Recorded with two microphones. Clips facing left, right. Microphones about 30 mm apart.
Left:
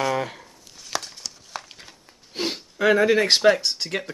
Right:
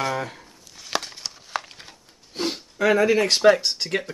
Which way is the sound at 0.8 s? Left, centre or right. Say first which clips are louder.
Right 2 dB; right.